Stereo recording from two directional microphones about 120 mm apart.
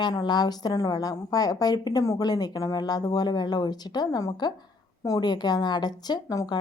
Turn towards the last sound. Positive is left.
turn(degrees=30)  # may be behind; listen again after turning